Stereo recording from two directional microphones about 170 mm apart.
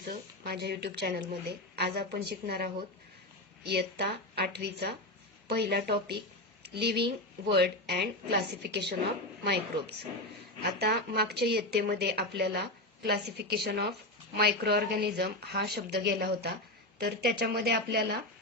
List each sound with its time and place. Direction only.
0.1 s a woman's voice: 70° right (ahead or behind)
10.7 s speech: 70° right (ahead or behind)